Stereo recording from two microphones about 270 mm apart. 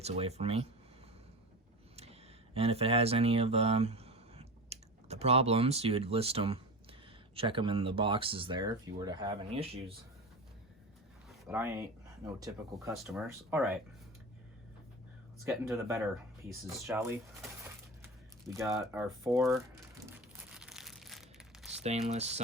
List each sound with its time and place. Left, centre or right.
0.0 s speech: right
2.6 s speech: right
11.3 s speech: centre
12.9 s speech: centre
15.6 s speech: centre
18.0 s a sound: centre
19.3 s speech: centre
20.6 s crumpling: centre
21.8 s speech: right